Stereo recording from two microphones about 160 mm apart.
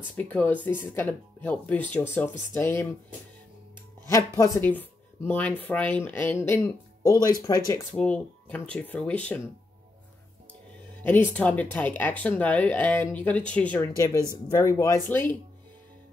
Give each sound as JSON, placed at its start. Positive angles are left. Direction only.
{"t": 0.2, "sound": "speech", "side_deg": 10}
{"t": 4.1, "sound": "speech", "side_deg": 15}
{"t": 7.9, "sound": "speech", "side_deg": 10}
{"t": 11.0, "sound": "speech", "side_deg": 10}